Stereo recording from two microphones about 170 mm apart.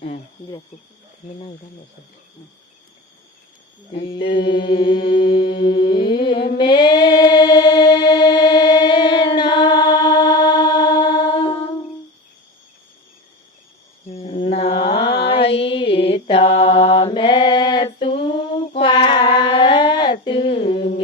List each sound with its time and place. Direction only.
3.9 s mantra: 30° left (ahead or behind)
5.3 s music: 30° left (ahead or behind)
10.6 s mantra: 25° left (ahead or behind)
14.1 s mantra: 35° left (ahead or behind)
18.0 s a sound: 30° left (ahead or behind)